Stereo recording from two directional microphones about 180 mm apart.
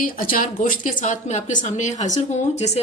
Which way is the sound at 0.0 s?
50° left (ahead or behind).